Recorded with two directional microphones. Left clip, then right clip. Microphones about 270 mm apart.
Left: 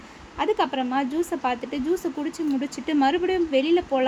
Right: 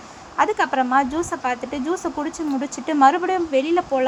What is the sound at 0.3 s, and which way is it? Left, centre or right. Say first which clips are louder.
Speech: right 5 dB; centre.